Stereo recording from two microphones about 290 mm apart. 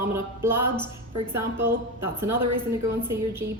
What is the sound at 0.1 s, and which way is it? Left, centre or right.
A woman's voice, centre.